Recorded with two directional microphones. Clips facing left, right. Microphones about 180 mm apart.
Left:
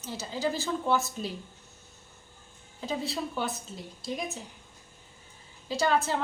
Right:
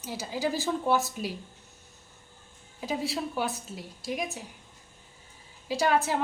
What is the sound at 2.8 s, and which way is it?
A woman's voice, 10° right (ahead or behind).